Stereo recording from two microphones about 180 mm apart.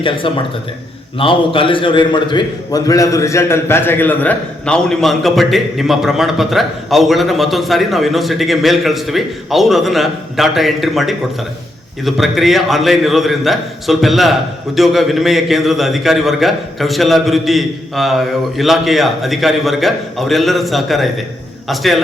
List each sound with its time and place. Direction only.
0.0 s a man's voice: 30° left (ahead or behind); by 22.0 s centre (ahead or behind)